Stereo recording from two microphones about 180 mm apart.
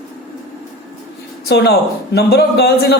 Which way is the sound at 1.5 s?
65° left (ahead or behind).